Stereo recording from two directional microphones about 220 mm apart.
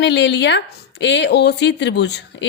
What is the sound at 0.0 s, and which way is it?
A woman's voice, 55° left (ahead or behind).